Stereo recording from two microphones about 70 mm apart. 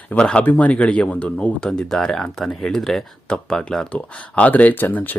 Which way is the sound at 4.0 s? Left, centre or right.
Left.